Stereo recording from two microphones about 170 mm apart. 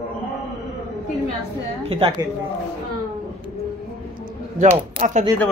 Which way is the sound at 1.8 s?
35° right (ahead or behind).